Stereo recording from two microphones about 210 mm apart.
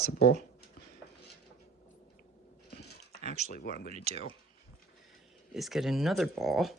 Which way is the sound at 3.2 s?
35° right (ahead or behind).